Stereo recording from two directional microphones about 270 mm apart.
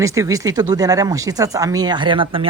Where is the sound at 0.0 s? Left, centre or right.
Centre.